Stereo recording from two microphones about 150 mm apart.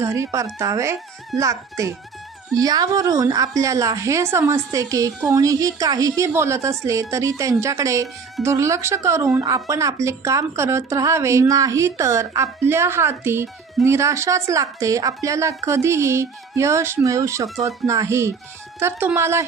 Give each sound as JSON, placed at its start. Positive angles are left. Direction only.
{"t": 0.0, "sound": "speech", "side_deg": -20}